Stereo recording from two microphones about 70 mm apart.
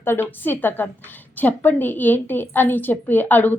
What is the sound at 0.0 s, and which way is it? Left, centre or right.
A woman's voice, left.